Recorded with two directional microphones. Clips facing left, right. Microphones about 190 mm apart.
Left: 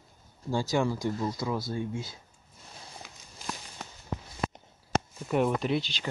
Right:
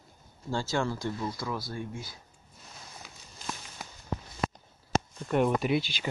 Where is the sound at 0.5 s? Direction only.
15° left (ahead or behind).